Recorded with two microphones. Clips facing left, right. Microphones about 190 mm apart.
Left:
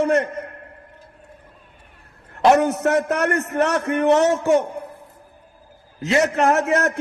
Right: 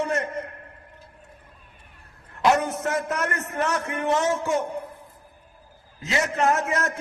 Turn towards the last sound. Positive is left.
turn(degrees=70)  # may be behind; listen again after turning